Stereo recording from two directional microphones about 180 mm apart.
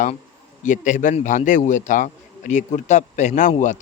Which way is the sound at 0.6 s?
45° left (ahead or behind).